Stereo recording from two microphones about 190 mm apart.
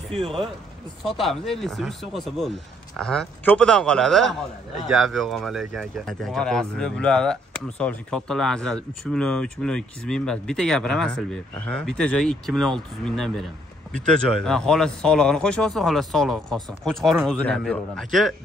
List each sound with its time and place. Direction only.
0.1 s speech: 30° right (ahead or behind)
1.0 s speech: centre (ahead or behind)